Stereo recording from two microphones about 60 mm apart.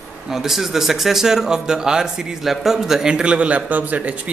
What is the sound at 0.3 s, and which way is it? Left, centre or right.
Speech, centre.